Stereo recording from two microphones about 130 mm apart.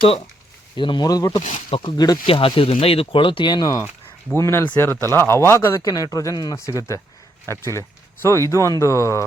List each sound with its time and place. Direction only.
0.0 s speech: 50° left (ahead or behind)
0.8 s speech: 35° left (ahead or behind)
4.4 s speech: 20° left (ahead or behind)